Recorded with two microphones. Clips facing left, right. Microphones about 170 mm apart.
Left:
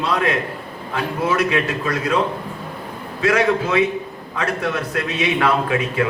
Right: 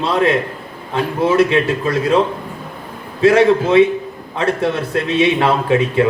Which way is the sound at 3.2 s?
30° right (ahead or behind).